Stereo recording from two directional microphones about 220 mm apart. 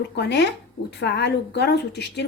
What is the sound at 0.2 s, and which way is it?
A woman's voice, 50° left (ahead or behind).